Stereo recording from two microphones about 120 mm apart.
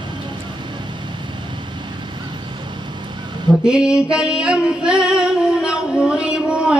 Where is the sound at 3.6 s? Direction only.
5° right (ahead or behind).